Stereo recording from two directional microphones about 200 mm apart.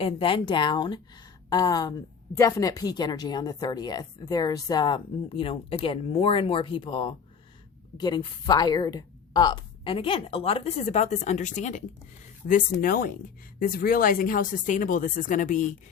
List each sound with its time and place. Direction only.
0.0 s speech: 25° left (ahead or behind); by 15.6 s 40° left (ahead or behind)